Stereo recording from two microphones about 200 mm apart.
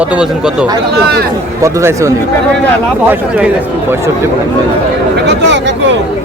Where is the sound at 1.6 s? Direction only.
15° right (ahead or behind).